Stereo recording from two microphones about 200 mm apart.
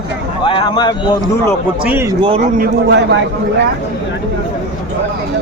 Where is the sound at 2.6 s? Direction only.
60° right (ahead or behind).